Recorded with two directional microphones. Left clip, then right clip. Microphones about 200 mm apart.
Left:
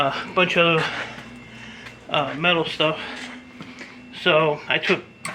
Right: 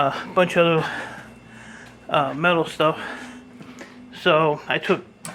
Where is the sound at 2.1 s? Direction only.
30° right (ahead or behind).